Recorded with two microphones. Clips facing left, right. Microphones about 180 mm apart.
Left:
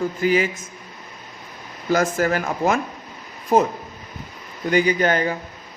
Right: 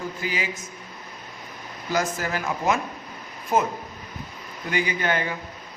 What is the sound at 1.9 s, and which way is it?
Speech, 55° left (ahead or behind).